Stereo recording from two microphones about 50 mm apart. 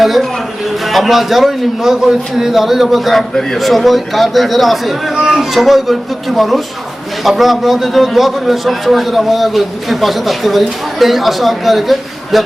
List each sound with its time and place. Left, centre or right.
0.0 s a man's voice: centre